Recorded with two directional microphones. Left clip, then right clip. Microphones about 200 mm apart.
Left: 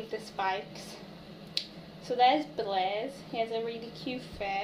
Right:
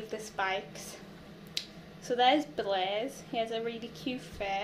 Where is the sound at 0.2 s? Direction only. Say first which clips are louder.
Even; 25° right (ahead or behind).